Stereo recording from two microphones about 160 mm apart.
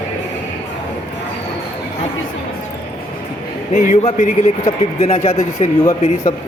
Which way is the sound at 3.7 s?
50° left (ahead or behind).